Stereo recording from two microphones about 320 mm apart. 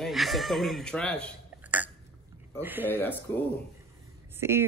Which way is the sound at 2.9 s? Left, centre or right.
Centre.